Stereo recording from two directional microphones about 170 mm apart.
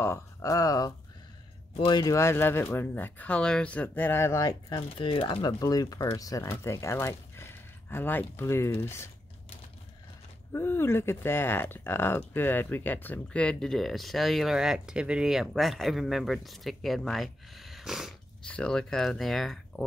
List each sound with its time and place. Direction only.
0.0 s speech: 15° left (ahead or behind)
10.5 s speech: 15° left (ahead or behind)